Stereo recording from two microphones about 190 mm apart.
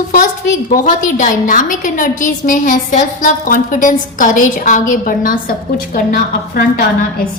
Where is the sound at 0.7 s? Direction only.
45° left (ahead or behind).